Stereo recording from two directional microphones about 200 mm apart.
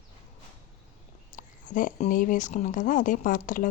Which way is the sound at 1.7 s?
40° left (ahead or behind).